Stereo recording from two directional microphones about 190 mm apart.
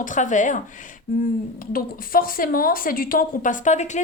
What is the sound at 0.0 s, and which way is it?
Speech, 40° left (ahead or behind).